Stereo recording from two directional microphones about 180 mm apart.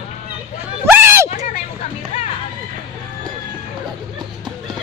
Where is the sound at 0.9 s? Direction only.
10° right (ahead or behind).